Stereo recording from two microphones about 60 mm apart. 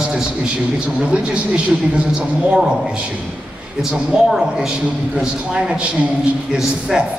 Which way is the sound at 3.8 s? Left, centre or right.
Centre.